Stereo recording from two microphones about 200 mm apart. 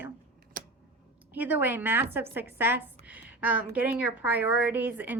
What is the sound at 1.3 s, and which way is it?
A woman's voice, 10° right (ahead or behind).